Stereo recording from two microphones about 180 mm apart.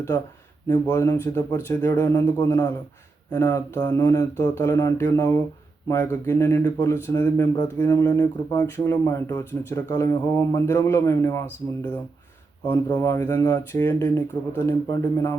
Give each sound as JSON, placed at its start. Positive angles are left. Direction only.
{"t": 0.7, "sound": "speech", "side_deg": 15}